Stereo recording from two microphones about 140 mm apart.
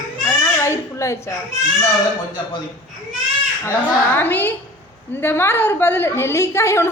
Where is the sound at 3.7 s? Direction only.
15° left (ahead or behind).